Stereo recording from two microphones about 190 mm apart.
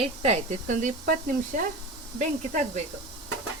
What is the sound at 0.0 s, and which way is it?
Speech, 35° right (ahead or behind).